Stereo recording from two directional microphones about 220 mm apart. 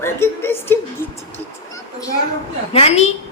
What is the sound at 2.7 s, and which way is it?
Speech, 25° left (ahead or behind).